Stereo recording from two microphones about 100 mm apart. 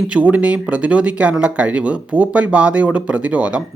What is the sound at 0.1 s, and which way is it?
Speech, 15° right (ahead or behind).